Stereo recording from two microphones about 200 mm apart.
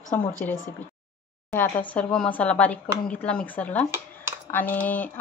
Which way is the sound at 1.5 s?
10° left (ahead or behind).